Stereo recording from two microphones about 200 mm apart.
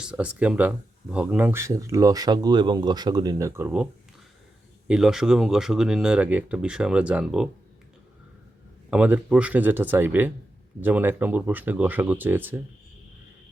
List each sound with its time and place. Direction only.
0.0 s speech: 5° right (ahead or behind)
4.9 s speech: centre (ahead or behind)
8.9 s speech: 5° right (ahead or behind)